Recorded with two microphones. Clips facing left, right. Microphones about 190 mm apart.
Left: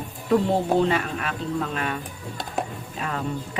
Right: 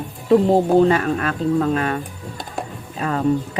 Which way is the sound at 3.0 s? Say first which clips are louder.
Right 7 dB; 40° right (ahead or behind).